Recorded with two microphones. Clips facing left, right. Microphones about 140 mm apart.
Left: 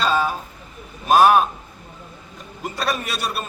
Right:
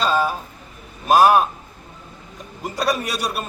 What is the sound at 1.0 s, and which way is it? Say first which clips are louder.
Speech: even; 5° right (ahead or behind).